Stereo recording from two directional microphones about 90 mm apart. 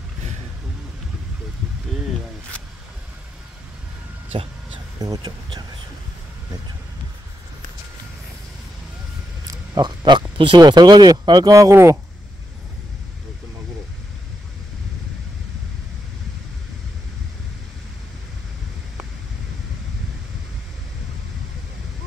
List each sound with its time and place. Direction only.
4.9 s speech: 45° right (ahead or behind)
9.5 s a sound: 50° right (ahead or behind); by 10.6 s 75° right (ahead or behind)
10.6 s speech: 50° right (ahead or behind)
11.7 s speech: 30° right (ahead or behind)